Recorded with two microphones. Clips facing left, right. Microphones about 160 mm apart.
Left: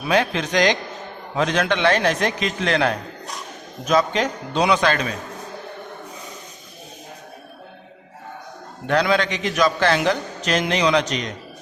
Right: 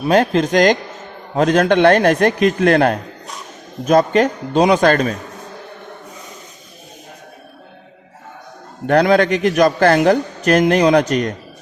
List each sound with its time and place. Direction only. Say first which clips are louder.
0.1 s a man's voice: right 6 dB; 45° right (ahead or behind)
8.9 s a man's voice: right 7 dB; 50° right (ahead or behind)